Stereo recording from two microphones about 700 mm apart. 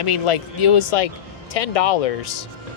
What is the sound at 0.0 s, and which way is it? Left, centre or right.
Speech, left.